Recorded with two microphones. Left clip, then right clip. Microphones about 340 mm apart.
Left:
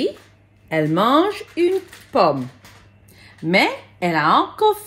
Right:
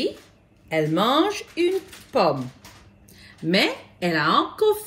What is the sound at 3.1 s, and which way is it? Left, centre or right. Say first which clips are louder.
A woman's voice: left 4 dB; centre.